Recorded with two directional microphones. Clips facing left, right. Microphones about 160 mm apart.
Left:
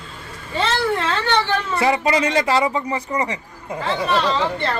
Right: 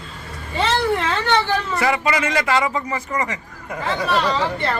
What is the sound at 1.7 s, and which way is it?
Speech, 30° left (ahead or behind).